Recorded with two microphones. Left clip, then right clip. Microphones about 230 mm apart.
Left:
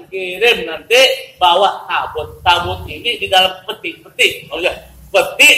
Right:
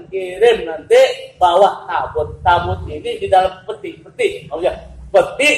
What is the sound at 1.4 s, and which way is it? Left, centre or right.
A man's voice, left.